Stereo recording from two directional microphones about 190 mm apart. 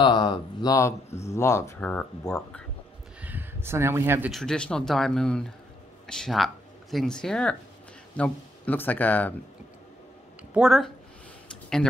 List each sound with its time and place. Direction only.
0.0 s speech: 25° left (ahead or behind); by 2.6 s 10° left (ahead or behind)
3.2 s speech: 10° right (ahead or behind)
4.3 s speech: centre (ahead or behind)
10.5 s speech: centre (ahead or behind)